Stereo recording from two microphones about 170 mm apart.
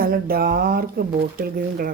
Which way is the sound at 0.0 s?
60° right (ahead or behind).